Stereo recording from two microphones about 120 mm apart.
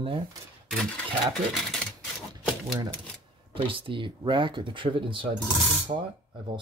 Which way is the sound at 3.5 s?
50° right (ahead or behind).